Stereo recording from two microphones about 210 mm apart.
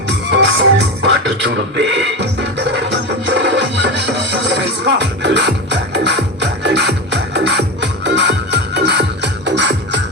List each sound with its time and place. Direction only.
0.3 s music: 55° right (ahead or behind)
2.6 s music: 55° right (ahead or behind)